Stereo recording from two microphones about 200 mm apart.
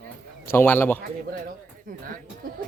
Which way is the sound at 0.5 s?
10° left (ahead or behind).